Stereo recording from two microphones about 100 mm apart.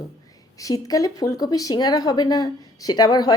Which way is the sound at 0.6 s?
35° left (ahead or behind).